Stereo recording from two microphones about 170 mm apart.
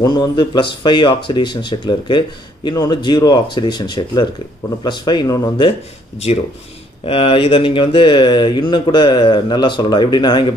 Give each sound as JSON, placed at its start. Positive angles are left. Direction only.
{"t": 0.0, "sound": "speech", "side_deg": 25}
{"t": 7.1, "sound": "speech", "side_deg": 30}